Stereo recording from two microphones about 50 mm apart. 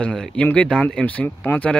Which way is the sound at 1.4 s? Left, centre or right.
Left.